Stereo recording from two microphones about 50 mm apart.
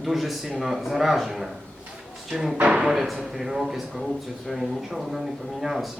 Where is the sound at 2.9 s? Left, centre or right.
Centre.